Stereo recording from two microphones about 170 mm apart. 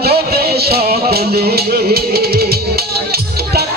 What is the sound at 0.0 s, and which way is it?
Music, 65° right (ahead or behind).